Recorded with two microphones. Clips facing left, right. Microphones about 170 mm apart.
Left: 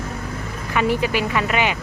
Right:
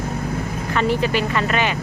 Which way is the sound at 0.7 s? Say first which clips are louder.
Even; 10° left (ahead or behind).